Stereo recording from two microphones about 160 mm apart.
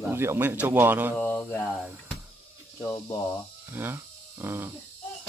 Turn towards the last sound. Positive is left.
turn(degrees=-15)  # may be behind; listen again after turning